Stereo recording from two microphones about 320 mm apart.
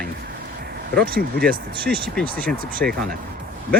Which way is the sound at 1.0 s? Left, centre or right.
Right.